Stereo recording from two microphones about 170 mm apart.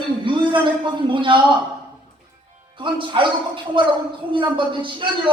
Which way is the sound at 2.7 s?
30° right (ahead or behind).